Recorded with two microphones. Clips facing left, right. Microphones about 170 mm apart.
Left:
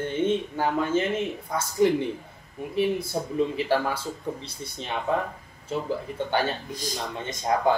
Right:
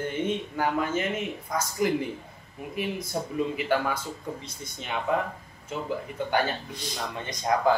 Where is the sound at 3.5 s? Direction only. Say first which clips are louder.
Left 2 dB; 30° left (ahead or behind).